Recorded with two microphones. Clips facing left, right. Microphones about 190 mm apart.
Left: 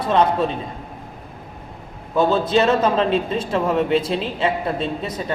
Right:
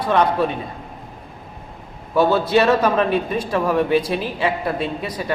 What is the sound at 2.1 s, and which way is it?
A man's voice, 20° left (ahead or behind).